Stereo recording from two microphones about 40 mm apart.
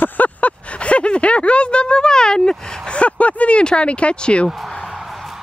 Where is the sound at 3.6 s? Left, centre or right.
Left.